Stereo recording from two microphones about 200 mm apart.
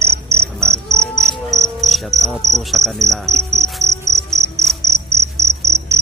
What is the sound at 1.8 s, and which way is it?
Cricket, centre (ahead or behind).